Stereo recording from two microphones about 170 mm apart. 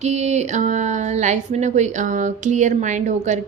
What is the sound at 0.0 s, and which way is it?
A woman's voice, 40° right (ahead or behind).